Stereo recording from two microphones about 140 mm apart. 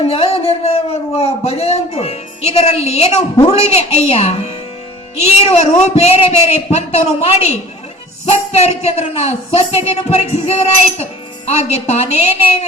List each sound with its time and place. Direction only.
0.0 s speech: 45° left (ahead or behind)